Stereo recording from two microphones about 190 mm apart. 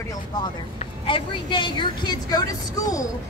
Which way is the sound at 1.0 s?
25° left (ahead or behind).